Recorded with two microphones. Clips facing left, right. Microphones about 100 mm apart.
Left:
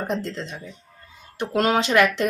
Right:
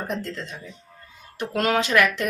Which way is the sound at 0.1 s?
30° left (ahead or behind).